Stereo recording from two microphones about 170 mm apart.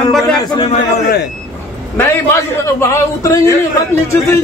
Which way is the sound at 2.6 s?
15° left (ahead or behind).